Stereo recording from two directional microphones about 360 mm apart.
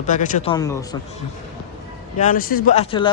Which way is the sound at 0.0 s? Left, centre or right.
Left.